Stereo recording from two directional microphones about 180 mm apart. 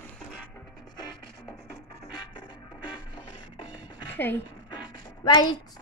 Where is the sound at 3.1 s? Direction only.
25° left (ahead or behind).